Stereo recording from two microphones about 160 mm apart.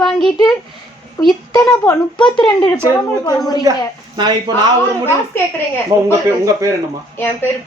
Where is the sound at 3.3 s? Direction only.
25° left (ahead or behind).